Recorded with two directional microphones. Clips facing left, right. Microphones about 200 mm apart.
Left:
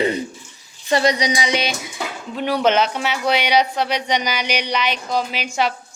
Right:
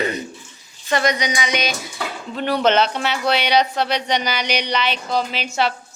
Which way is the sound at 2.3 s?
10° left (ahead or behind).